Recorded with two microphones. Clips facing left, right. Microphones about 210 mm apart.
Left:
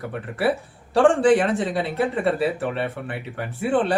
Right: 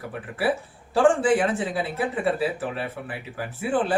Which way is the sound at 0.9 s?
Centre (ahead or behind).